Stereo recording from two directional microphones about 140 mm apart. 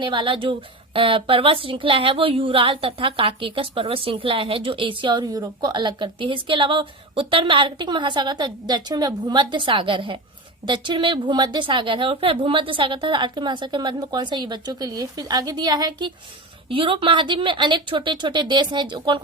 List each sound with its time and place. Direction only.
0.0 s speech: 35° right (ahead or behind)